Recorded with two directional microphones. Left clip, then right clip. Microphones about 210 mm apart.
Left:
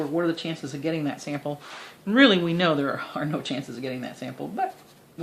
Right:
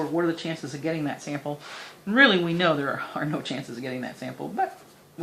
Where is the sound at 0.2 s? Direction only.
35° left (ahead or behind).